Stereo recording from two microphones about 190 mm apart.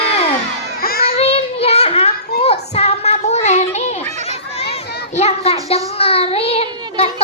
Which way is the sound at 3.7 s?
35° left (ahead or behind).